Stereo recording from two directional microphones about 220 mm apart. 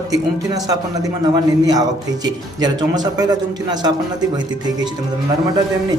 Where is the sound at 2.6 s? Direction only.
20° right (ahead or behind).